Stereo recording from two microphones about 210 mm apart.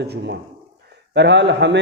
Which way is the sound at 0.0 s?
50° right (ahead or behind).